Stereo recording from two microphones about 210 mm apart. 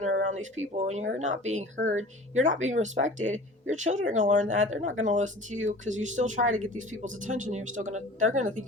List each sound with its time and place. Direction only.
0.3 s speech: 70° right (ahead or behind)
0.8 s speech: 35° right (ahead or behind)